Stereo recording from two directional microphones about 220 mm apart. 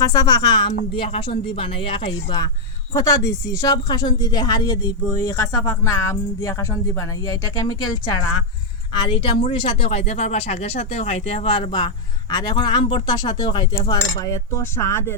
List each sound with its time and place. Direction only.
0.0 s speech: 15° left (ahead or behind)
2.9 s speech: 15° left (ahead or behind)
9.0 s speech: 25° left (ahead or behind)